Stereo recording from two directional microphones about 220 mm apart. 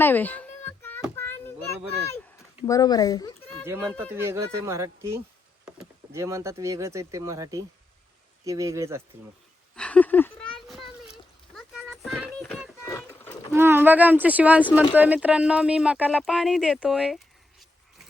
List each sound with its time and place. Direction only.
0.0 s a sound: 10° left (ahead or behind)
1.1 s children playing: 10° left (ahead or behind)
2.6 s speech: 15° left (ahead or behind)
3.7 s speech: 10° right (ahead or behind)
9.7 s a sound: 5° left (ahead or behind)
12.8 s splash: 10° left (ahead or behind)
13.5 s speech: 10° right (ahead or behind)